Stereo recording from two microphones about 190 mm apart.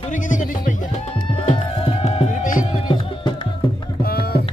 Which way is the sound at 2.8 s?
25° left (ahead or behind).